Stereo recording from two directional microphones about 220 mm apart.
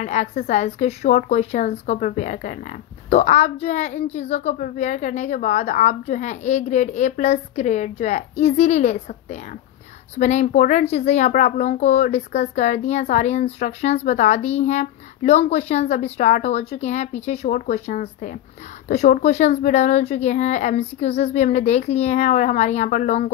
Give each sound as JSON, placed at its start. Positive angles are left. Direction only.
{"t": 0.0, "sound": "a child's voice", "side_deg": 30}